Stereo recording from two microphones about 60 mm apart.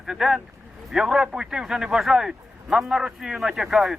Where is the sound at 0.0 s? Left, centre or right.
Centre.